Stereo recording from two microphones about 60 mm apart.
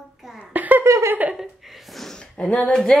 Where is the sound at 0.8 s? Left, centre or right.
Right.